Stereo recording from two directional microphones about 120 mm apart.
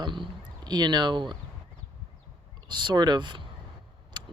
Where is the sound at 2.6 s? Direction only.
40° right (ahead or behind).